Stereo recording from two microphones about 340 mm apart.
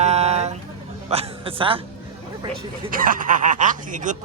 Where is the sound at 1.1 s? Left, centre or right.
Centre.